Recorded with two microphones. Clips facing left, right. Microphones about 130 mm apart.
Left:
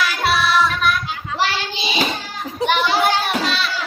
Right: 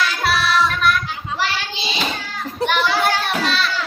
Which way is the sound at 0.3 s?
Centre (ahead or behind).